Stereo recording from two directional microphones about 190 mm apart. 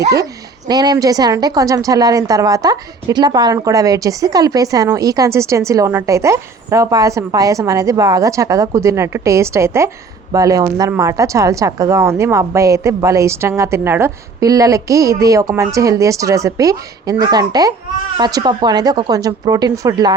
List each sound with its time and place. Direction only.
0.0 s a woman's voice: 20° right (ahead or behind)